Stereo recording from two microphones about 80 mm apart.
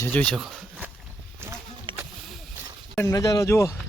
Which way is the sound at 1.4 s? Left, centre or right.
Right.